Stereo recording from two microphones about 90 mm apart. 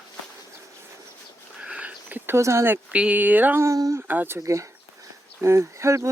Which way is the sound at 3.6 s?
35° right (ahead or behind).